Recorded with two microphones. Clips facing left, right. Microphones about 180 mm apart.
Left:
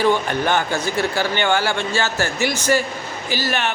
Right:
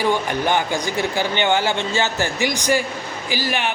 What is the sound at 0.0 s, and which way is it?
A man's voice, 15° right (ahead or behind).